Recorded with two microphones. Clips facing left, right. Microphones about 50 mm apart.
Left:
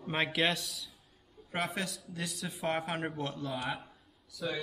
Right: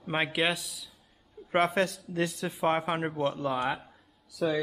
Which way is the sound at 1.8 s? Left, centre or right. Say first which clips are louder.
Right 10 dB; right.